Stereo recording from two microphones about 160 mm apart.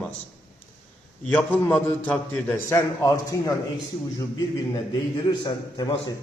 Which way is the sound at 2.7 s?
20° left (ahead or behind).